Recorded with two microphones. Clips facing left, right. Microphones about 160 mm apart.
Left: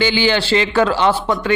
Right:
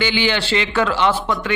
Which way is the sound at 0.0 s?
35° left (ahead or behind).